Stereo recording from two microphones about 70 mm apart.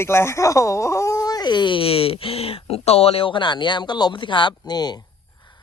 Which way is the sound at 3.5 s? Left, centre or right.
Left.